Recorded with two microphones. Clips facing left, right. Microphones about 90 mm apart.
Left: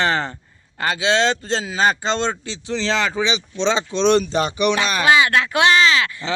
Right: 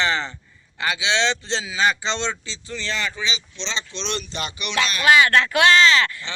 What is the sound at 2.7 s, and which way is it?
Speech, 90° left.